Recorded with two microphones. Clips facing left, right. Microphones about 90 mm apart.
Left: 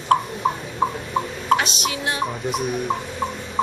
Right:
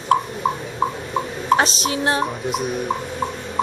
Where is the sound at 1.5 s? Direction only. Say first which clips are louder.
Right 2 dB; 35° right (ahead or behind).